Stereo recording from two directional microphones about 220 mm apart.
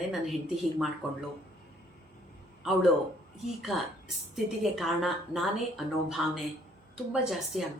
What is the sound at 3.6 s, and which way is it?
Speech, centre (ahead or behind).